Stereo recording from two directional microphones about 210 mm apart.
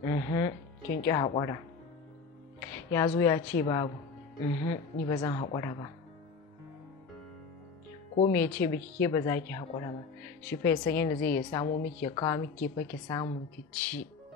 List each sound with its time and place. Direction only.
0.0 s a woman's voice: 15° left (ahead or behind)
2.6 s music: 10° left (ahead or behind)
3.2 s a woman's voice: 15° left (ahead or behind)
8.2 s a woman's voice: 10° left (ahead or behind)
13.7 s speech: 5° left (ahead or behind)